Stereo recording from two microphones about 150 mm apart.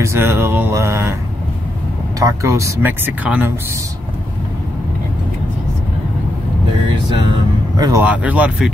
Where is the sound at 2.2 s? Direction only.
20° right (ahead or behind).